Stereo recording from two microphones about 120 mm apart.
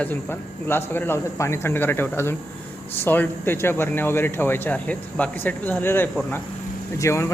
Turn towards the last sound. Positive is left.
turn(degrees=25)  # may be behind; listen again after turning